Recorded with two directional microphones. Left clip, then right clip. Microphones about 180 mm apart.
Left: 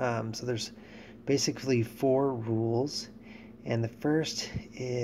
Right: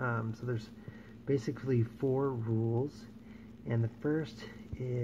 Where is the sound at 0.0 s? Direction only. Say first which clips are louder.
Left 5 dB; 30° left (ahead or behind).